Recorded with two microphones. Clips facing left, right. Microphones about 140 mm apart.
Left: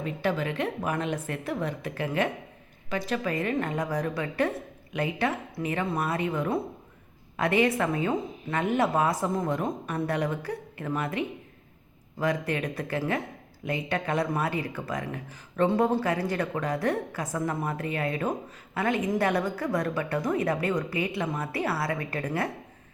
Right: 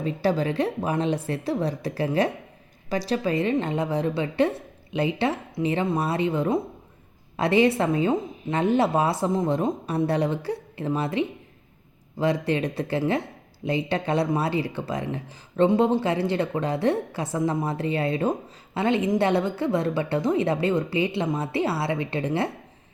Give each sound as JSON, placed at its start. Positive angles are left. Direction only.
{"t": 0.0, "sound": "speech", "side_deg": -35}